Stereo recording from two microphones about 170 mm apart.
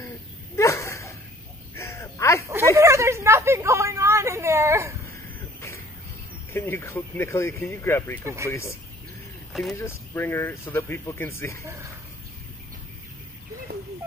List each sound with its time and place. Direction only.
0.6 s dog: 15° left (ahead or behind)
1.8 s caw: 15° left (ahead or behind)
2.4 s a sound: 15° right (ahead or behind)
6.5 s speech: 15° left (ahead or behind)
9.5 s speech: centre (ahead or behind)
9.8 s speech: 15° left (ahead or behind)
11.6 s speech: 15° right (ahead or behind)